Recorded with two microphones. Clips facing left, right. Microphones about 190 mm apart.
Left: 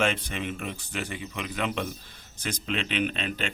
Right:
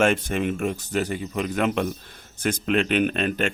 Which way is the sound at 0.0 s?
50° right (ahead or behind).